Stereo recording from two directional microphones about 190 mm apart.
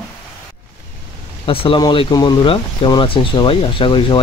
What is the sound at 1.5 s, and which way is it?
Speech, 30° left (ahead or behind).